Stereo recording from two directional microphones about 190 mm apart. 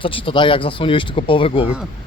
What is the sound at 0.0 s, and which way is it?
Speech, 30° left (ahead or behind).